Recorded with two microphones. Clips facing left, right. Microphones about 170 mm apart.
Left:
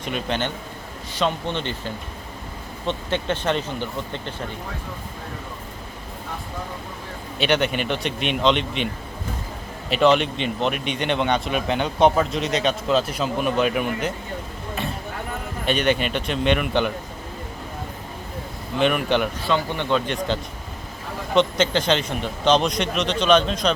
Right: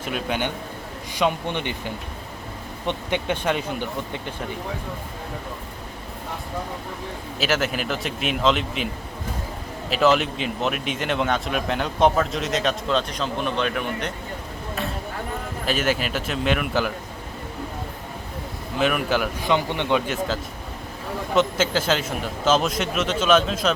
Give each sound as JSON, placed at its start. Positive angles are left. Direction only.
{"t": 0.0, "sound": "speech", "side_deg": -5}
{"t": 7.3, "sound": "speech", "side_deg": 0}
{"t": 9.9, "sound": "speech", "side_deg": 0}
{"t": 15.6, "sound": "speech", "side_deg": 0}
{"t": 18.8, "sound": "speech", "side_deg": -5}
{"t": 19.4, "sound": "speech", "side_deg": -15}
{"t": 20.1, "sound": "speech", "side_deg": -5}